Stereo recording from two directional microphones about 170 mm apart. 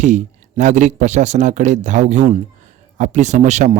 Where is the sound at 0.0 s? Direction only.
45° right (ahead or behind).